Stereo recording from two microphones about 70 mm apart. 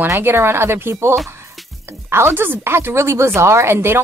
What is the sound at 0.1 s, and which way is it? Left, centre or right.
A woman's voice, right.